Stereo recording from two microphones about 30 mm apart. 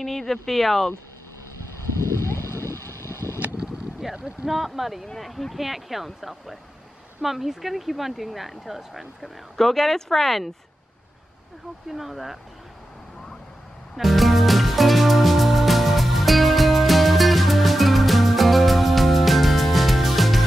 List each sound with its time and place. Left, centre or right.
0.0 s speech: centre
4.0 s speech: centre
5.0 s speech: centre
9.6 s speech: centre
11.9 s speech: centre
13.9 s music: centre